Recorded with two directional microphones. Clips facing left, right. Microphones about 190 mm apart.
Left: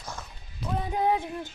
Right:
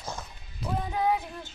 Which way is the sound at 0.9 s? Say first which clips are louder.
Left 2 dB; 25° left (ahead or behind).